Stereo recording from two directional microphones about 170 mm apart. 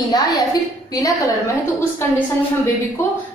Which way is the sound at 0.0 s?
20° left (ahead or behind).